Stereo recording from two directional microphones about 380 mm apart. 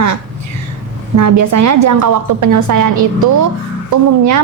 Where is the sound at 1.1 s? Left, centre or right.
Right.